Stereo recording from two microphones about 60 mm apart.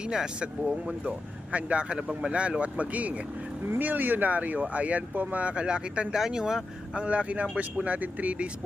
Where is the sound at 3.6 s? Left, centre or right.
Right; by 7.0 s centre.